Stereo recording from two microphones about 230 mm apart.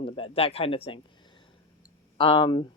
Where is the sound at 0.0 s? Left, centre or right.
Left.